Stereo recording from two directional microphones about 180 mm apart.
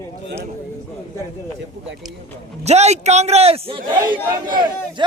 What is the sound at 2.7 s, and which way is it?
A man's voice, 40° right (ahead or behind).